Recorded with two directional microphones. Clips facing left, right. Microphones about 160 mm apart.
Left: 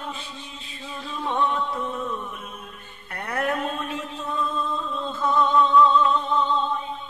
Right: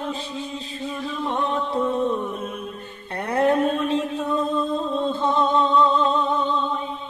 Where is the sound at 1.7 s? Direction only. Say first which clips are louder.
Right 7 dB; 30° right (ahead or behind).